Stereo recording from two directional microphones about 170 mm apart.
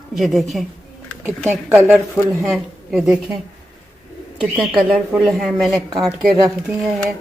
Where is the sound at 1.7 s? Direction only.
5° right (ahead or behind).